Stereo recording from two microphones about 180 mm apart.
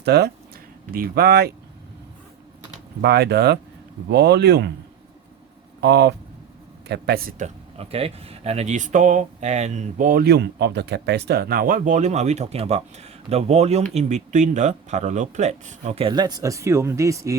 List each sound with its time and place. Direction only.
0.0 s speech: 65° right (ahead or behind)
0.9 s speech: 55° right (ahead or behind)
3.0 s speech: 65° right (ahead or behind)
5.8 s speech: 70° right (ahead or behind); by 17.3 s 15° right (ahead or behind)